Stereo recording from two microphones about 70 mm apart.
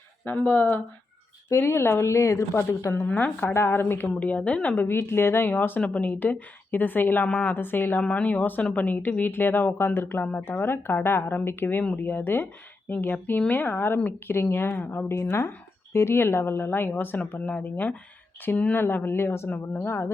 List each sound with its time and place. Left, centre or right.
0.3 s speech: left
1.5 s a woman's voice: left
3.5 s a woman's voice: left
4.2 s speech: centre
4.9 s speech: left
7.5 s a woman's voice: left
18.8 s a woman's voice: left